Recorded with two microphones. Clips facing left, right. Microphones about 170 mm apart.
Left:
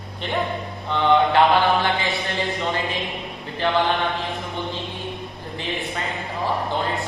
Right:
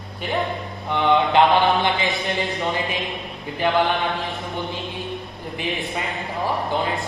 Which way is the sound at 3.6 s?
15° right (ahead or behind).